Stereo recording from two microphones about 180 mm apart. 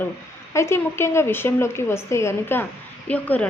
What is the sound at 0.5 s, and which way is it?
Speech, 15° left (ahead or behind).